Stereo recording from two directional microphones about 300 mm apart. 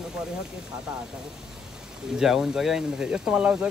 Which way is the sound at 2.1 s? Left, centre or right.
Centre.